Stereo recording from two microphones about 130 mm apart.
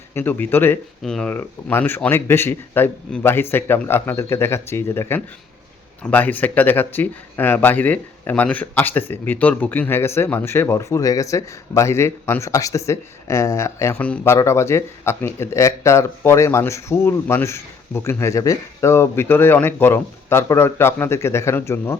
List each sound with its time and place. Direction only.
0.1 s speech: 15° left (ahead or behind)
1.0 s speech: 5° left (ahead or behind)
1.3 s speech: 15° left (ahead or behind)